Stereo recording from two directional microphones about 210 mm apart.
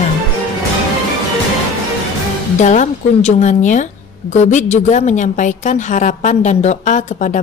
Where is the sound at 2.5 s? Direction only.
35° left (ahead or behind).